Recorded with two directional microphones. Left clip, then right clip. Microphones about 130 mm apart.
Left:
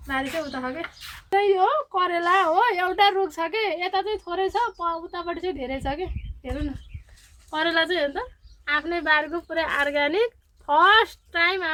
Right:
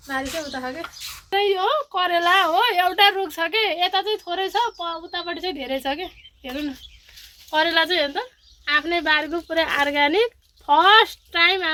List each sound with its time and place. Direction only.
0.3 s a woman's voice: 5° left (ahead or behind); by 11.7 s 25° right (ahead or behind)